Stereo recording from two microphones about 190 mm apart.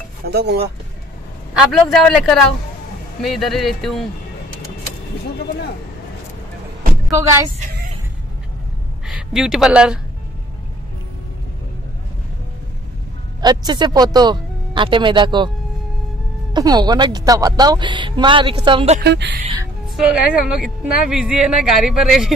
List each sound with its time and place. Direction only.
0.3 s speech: 60° right (ahead or behind)
1.5 s speech: centre (ahead or behind)
9.0 s speech: centre (ahead or behind)
13.4 s speech: 20° right (ahead or behind)
16.5 s a woman's voice: 20° right (ahead or behind)
19.0 s speech: 60° right (ahead or behind)
20.2 s speech: 5° right (ahead or behind)